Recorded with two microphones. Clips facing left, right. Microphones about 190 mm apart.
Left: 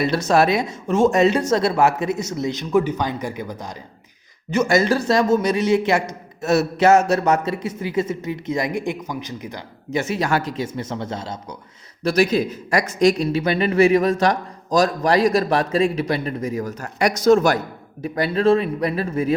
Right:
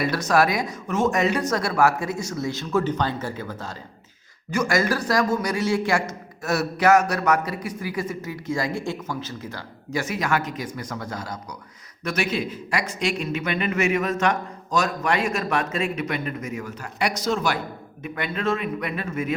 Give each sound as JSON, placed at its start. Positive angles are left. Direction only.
{"t": 0.0, "sound": "a man's voice", "side_deg": 25}
{"t": 12.0, "sound": "speech", "side_deg": 35}
{"t": 18.0, "sound": "speech", "side_deg": 35}